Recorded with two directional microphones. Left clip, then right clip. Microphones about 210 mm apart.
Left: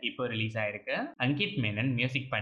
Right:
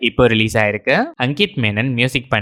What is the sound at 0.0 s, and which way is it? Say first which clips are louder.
Speech: right 19 dB; 50° right (ahead or behind).